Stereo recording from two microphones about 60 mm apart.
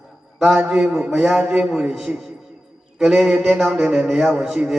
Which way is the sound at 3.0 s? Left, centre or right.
Centre.